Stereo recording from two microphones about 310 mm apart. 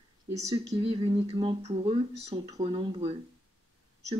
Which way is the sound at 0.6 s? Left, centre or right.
Centre.